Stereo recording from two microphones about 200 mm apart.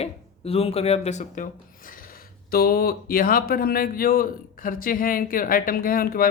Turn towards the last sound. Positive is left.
turn(degrees=45)  # may be behind; listen again after turning